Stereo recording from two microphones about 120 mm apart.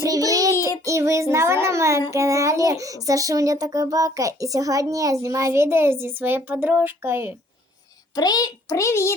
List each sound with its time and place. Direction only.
0.0 s child singing: 30° right (ahead or behind)
0.9 s a child's voice: 25° right (ahead or behind)
8.1 s a child's voice: 35° left (ahead or behind)